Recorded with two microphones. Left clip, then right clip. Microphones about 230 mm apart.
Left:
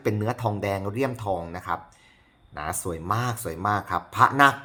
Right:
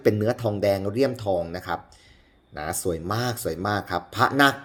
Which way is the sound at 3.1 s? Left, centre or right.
Left.